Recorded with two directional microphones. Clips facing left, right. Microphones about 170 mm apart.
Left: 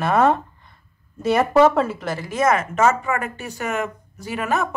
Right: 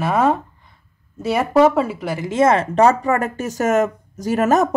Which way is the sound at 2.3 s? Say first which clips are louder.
Right 4 dB; 30° right (ahead or behind).